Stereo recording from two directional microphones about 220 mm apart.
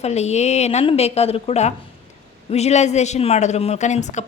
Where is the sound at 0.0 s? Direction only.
30° left (ahead or behind).